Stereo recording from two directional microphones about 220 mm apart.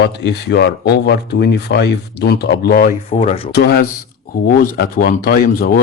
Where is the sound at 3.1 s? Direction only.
30° left (ahead or behind).